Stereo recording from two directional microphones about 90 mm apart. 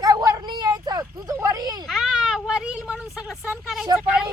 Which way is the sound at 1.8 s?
5° right (ahead or behind).